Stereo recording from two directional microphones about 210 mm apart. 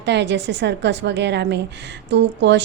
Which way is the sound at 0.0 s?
55° right (ahead or behind).